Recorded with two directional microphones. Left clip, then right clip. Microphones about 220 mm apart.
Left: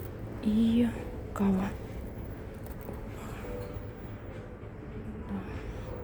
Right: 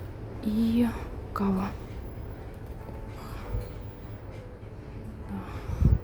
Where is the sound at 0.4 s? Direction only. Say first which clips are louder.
Right 1 dB; 20° right (ahead or behind).